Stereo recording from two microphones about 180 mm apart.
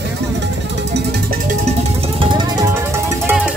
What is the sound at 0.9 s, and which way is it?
Music, 65° right (ahead or behind).